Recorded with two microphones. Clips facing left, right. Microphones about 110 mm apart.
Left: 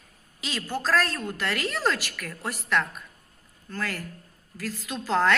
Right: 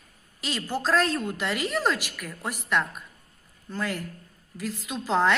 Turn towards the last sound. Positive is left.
turn(degrees=-5)  # may be behind; listen again after turning